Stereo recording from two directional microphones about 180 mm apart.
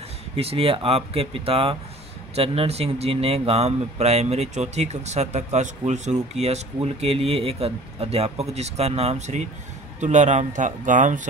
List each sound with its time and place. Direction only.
0.4 s speech: 35° right (ahead or behind)